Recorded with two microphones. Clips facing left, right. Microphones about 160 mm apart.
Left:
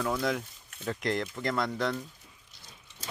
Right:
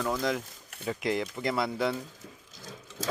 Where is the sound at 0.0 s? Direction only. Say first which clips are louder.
Even; centre (ahead or behind).